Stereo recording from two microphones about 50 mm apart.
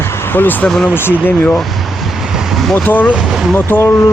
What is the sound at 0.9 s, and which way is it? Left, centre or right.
Speech, left.